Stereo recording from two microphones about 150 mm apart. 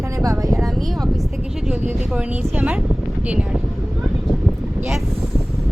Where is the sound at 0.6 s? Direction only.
Centre (ahead or behind).